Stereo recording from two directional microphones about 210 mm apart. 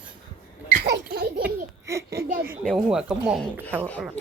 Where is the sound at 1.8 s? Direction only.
15° right (ahead or behind).